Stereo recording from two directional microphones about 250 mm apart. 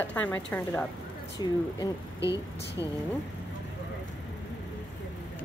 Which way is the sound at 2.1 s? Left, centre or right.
Centre.